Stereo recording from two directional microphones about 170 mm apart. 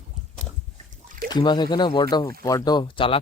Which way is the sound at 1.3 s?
25° left (ahead or behind).